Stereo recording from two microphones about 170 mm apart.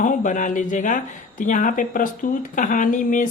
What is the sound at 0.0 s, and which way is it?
Speech, 50° left (ahead or behind).